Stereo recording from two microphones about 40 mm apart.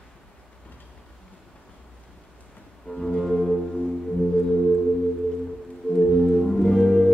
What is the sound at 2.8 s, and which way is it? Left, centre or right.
Music, centre.